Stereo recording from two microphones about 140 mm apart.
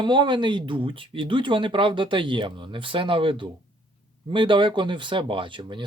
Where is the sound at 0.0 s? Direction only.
35° right (ahead or behind).